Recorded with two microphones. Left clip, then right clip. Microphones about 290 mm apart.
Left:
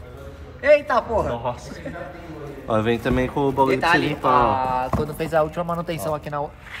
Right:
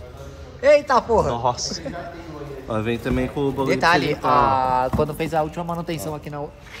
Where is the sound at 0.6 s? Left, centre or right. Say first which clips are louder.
Right 1 dB; right.